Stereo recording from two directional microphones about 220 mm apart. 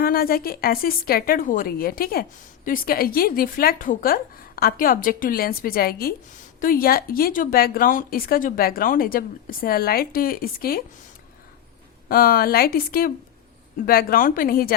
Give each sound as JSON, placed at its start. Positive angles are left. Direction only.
{"t": 0.0, "sound": "speech", "side_deg": 45}
{"t": 12.0, "sound": "speech", "side_deg": 40}